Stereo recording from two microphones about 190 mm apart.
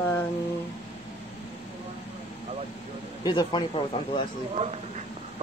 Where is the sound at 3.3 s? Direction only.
25° left (ahead or behind).